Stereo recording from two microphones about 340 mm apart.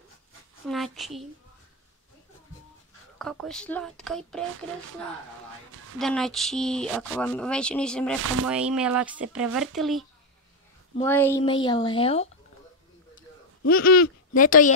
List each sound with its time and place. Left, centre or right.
0.7 s speech: centre
3.2 s speech: centre
5.9 s speech: centre
8.2 s speech: right
8.5 s a woman's voice: centre
13.7 s a sound: left